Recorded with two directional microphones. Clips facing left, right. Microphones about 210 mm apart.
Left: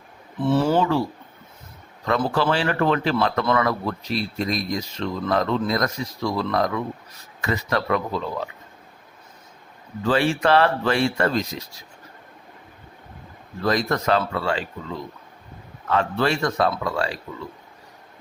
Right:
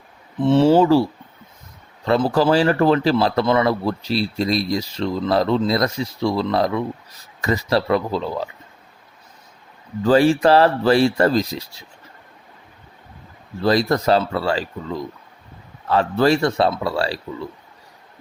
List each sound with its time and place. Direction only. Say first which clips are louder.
0.4 s speech: right 6 dB; 25° right (ahead or behind)
2.0 s speech: right 5 dB; 35° right (ahead or behind)
10.0 s speech: right 6 dB; 40° right (ahead or behind)
13.6 s speech: right 5 dB; 30° right (ahead or behind)
15.9 s speech: right 5 dB; 35° right (ahead or behind)